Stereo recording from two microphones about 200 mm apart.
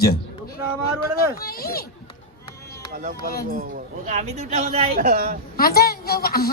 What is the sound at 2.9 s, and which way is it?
Music, 45° right (ahead or behind).